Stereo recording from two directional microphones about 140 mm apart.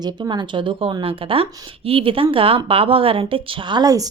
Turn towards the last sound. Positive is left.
turn(degrees=-25)  # may be behind; listen again after turning